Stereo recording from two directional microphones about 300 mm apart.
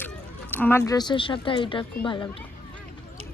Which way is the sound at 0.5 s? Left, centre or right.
Centre.